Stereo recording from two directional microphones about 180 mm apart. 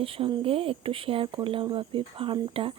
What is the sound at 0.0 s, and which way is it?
Speech, 30° right (ahead or behind).